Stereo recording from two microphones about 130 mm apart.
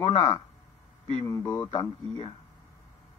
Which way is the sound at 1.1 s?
35° left (ahead or behind).